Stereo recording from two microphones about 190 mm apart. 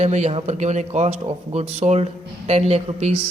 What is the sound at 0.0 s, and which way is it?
Speech, 35° right (ahead or behind).